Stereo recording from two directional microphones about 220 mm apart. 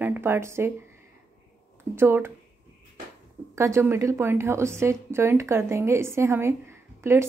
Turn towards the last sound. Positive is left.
turn(degrees=-10)  # may be behind; listen again after turning